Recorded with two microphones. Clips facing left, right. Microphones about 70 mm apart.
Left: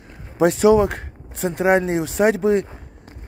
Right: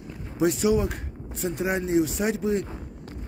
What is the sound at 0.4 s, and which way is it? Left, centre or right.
Speech, left.